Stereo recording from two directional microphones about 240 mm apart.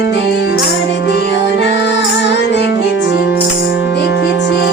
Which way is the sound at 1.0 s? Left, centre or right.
Left.